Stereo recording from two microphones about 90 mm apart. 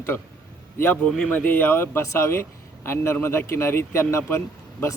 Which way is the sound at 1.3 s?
20° left (ahead or behind).